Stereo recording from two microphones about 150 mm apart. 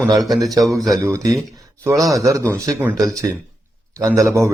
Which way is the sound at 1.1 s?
20° right (ahead or behind).